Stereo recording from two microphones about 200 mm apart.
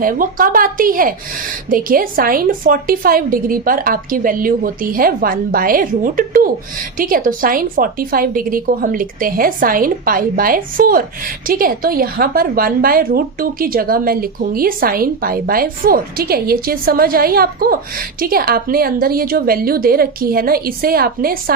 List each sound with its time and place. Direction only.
0.0 s a woman's voice: 45° right (ahead or behind)